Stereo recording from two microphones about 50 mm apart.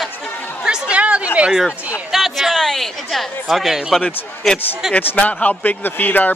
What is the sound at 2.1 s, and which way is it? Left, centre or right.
Speech, centre.